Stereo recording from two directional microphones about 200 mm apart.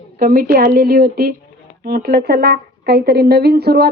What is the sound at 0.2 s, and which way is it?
A woman's voice, 45° right (ahead or behind).